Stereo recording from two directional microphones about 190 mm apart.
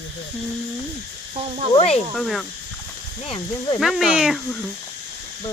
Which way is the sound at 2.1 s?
Centre (ahead or behind).